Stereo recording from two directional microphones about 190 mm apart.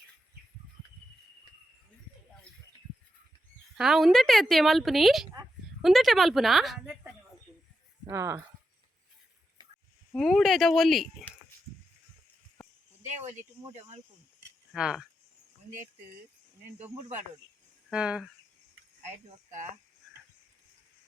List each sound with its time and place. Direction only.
3.8 s a woman's voice: centre (ahead or behind)
8.0 s speech: 15° right (ahead or behind)
10.1 s a woman's voice: centre (ahead or behind)
14.7 s speech: 5° right (ahead or behind)
17.8 s speech: 5° right (ahead or behind)